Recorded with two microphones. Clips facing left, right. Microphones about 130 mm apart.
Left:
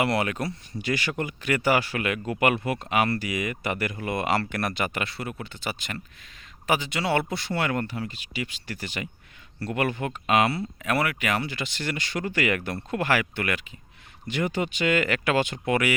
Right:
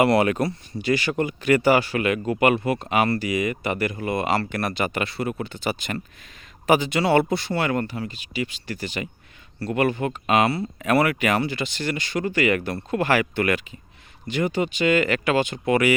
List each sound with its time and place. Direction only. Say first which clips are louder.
0.0 s speech: right 7 dB; 40° right (ahead or behind)
14.3 s speech: right 4 dB; 25° right (ahead or behind)